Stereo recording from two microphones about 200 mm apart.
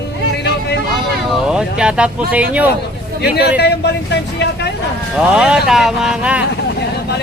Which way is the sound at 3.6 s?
55° left (ahead or behind).